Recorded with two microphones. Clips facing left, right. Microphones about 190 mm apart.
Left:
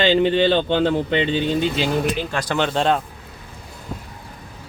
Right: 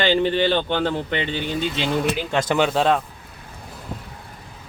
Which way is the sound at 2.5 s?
5° right (ahead or behind).